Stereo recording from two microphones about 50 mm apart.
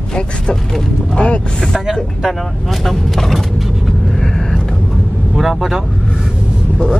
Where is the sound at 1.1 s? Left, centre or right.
Left.